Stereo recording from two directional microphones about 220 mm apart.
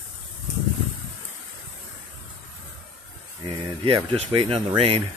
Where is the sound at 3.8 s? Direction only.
20° right (ahead or behind).